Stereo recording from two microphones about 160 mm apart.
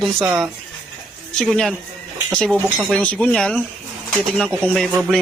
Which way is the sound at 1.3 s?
Centre (ahead or behind).